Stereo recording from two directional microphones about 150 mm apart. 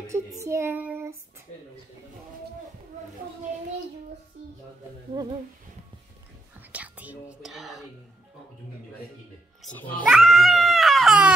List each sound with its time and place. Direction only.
0.0 s child singing: 20° right (ahead or behind)
6.7 s speech: 10° right (ahead or behind)
9.8 s speech: 10° left (ahead or behind)
10.0 s speech: 5° right (ahead or behind)